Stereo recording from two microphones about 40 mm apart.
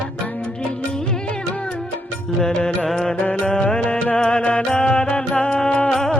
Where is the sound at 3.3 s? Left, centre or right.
Centre.